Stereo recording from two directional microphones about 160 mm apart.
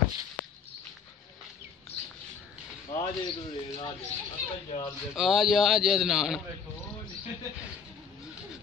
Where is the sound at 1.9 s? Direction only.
40° left (ahead or behind).